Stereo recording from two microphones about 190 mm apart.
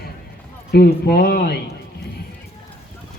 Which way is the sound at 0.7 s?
55° left (ahead or behind).